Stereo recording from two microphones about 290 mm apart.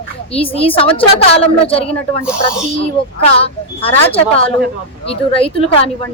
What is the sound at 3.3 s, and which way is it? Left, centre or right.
Speech, centre.